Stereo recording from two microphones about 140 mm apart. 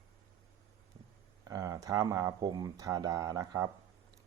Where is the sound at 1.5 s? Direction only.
25° right (ahead or behind).